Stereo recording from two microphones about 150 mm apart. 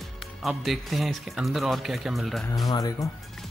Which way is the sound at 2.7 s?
25° left (ahead or behind).